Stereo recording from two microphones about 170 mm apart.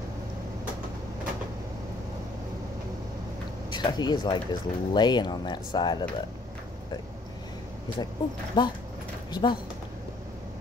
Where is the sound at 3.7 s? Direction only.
25° left (ahead or behind).